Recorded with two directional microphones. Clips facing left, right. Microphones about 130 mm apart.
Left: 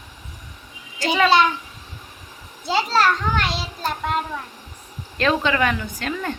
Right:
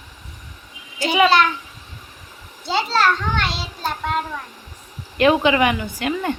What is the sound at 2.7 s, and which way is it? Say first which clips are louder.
Speech: even; 10° left (ahead or behind).